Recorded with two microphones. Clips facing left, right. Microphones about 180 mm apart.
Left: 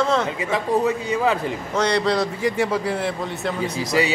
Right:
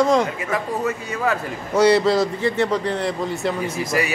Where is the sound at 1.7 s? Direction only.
5° right (ahead or behind).